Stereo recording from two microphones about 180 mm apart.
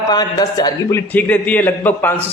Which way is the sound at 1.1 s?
10° left (ahead or behind).